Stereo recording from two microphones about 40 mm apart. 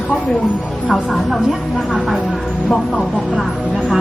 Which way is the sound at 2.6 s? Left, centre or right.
Centre.